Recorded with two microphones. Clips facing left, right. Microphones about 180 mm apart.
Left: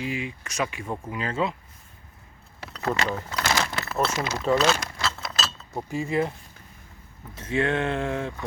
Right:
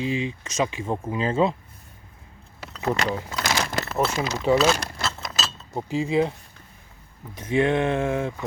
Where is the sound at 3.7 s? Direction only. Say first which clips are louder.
Right 4 dB; 40° right (ahead or behind).